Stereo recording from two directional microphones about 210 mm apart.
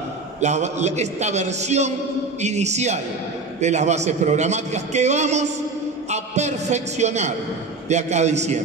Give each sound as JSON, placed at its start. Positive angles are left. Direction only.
{"t": 0.4, "sound": "a man's voice", "side_deg": -35}